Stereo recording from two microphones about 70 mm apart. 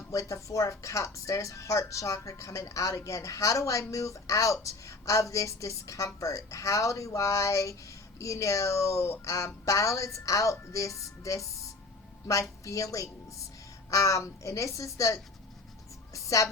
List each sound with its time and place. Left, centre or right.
0.1 s speech: left